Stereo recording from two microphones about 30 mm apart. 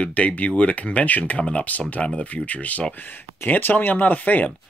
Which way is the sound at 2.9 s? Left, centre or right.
Left.